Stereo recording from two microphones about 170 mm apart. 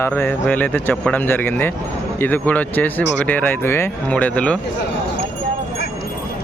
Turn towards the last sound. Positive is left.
turn(degrees=5)  # may be behind; listen again after turning